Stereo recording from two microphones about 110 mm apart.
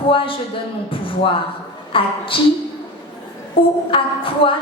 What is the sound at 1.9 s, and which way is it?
Speech, 55° left (ahead or behind).